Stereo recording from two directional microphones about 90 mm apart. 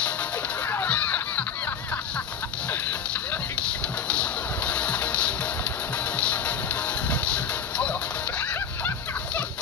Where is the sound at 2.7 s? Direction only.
20° left (ahead or behind).